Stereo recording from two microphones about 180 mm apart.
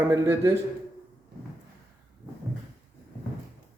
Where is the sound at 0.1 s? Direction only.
15° right (ahead or behind).